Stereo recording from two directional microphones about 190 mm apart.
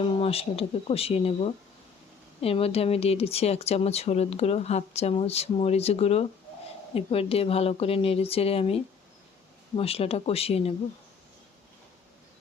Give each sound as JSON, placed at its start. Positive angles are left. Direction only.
{"t": 0.0, "sound": "speech", "side_deg": 30}